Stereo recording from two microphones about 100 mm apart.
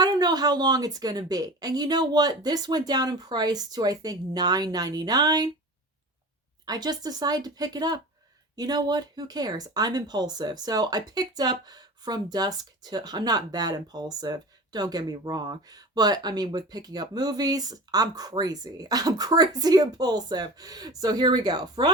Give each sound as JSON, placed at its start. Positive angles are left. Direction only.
{"t": 0.0, "sound": "a woman's voice", "side_deg": -40}
{"t": 6.7, "sound": "speech", "side_deg": -45}